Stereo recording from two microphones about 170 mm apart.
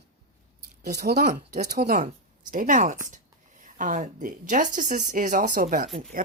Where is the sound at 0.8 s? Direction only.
70° right (ahead or behind).